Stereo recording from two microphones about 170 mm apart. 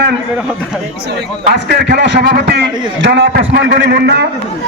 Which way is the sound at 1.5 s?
75° right (ahead or behind).